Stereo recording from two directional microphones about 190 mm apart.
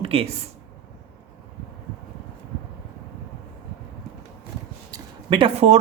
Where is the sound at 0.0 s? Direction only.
30° right (ahead or behind).